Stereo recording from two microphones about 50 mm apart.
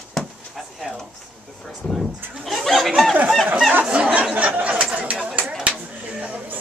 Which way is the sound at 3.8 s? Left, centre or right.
Right.